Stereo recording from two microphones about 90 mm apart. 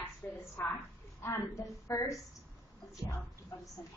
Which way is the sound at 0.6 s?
25° left (ahead or behind).